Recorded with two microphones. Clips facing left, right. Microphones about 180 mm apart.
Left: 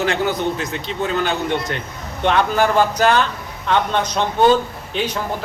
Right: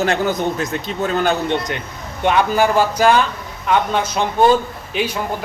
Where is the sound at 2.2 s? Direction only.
10° right (ahead or behind).